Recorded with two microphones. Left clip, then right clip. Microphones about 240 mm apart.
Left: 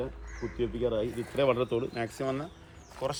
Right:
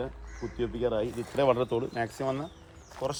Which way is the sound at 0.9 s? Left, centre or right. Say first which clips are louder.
Right 1 dB; right.